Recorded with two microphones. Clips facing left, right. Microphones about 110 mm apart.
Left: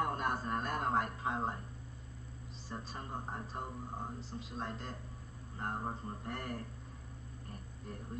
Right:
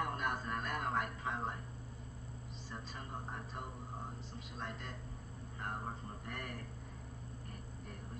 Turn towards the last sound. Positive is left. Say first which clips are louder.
# left 4 dB
turn(degrees=35)  # may be behind; listen again after turning